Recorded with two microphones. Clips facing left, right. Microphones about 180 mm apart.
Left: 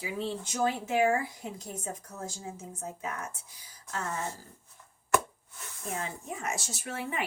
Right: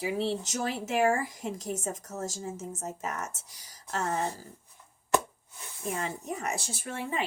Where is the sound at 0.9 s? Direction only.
90° right.